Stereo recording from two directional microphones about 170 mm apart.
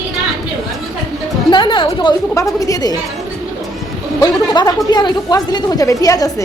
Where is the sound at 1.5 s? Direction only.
30° left (ahead or behind).